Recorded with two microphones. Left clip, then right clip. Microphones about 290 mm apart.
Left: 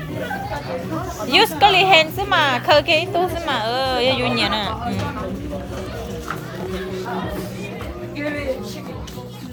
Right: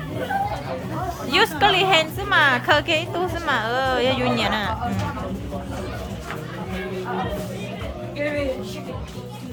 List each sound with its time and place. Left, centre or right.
1.3 s speech: centre